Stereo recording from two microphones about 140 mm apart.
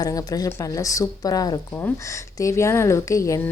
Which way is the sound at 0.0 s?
25° left (ahead or behind).